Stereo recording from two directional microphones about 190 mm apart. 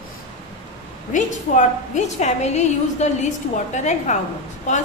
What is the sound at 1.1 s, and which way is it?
A woman's voice, 40° left (ahead or behind).